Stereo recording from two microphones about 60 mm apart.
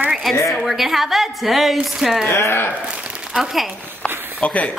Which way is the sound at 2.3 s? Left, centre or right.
Left.